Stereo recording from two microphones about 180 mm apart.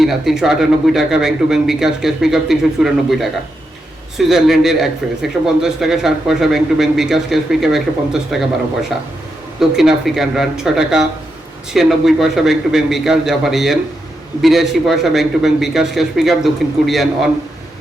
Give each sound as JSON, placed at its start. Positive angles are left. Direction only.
{"t": 0.0, "sound": "speech", "side_deg": 0}
{"t": 9.6, "sound": "speech", "side_deg": 0}